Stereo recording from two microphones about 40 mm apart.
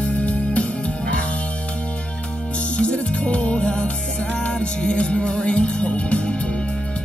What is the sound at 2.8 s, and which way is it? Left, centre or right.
Music, left.